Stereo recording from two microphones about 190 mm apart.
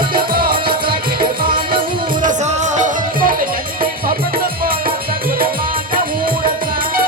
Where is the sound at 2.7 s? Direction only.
45° right (ahead or behind).